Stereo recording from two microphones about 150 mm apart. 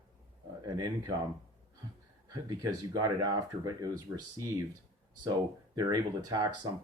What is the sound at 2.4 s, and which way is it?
Speech, 25° right (ahead or behind).